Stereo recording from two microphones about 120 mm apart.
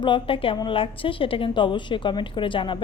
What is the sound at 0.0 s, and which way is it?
A woman's voice, 45° left (ahead or behind).